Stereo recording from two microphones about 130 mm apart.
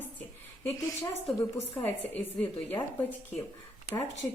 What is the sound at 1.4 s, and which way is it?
A woman's voice, 20° left (ahead or behind).